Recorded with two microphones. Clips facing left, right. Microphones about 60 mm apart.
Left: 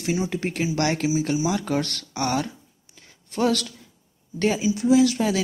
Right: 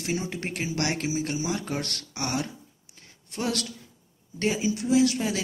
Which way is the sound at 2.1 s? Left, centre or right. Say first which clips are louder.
Left 6 dB; left.